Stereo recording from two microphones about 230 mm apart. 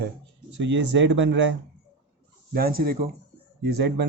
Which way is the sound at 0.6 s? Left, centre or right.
Right.